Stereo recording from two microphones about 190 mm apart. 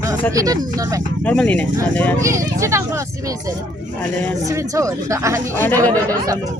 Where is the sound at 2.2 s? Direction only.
15° right (ahead or behind).